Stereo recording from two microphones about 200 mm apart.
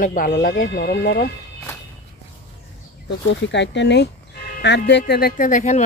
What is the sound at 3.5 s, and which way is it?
Speech, 60° left (ahead or behind).